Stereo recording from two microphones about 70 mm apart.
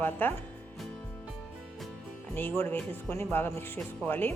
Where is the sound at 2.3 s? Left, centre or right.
Left.